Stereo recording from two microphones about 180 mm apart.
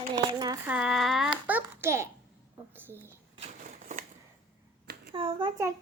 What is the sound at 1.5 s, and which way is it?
A child's voice, 15° right (ahead or behind).